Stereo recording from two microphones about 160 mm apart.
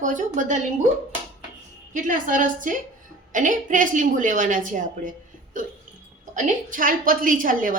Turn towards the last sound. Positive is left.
turn(degrees=-60)  # may be behind; listen again after turning